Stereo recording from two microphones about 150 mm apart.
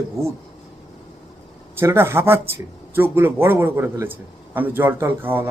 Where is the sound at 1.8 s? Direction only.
15° right (ahead or behind).